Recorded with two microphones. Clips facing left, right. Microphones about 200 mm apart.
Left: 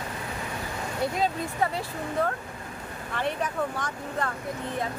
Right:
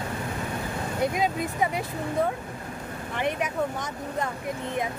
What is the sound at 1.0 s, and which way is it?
Speech, 15° right (ahead or behind).